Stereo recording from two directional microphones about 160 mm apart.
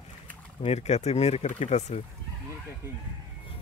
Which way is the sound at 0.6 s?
40° left (ahead or behind).